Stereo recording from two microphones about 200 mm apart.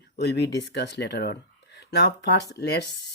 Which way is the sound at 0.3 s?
60° left (ahead or behind).